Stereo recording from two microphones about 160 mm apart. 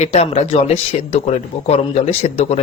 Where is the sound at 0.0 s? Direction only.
45° left (ahead or behind).